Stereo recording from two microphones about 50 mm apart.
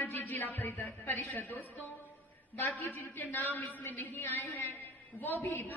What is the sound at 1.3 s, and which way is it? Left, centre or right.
A woman's voice, left.